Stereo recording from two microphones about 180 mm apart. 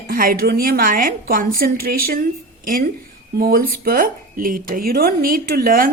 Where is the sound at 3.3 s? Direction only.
55° right (ahead or behind).